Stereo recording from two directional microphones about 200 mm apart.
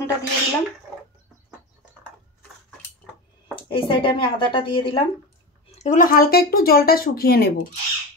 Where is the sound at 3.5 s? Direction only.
25° left (ahead or behind).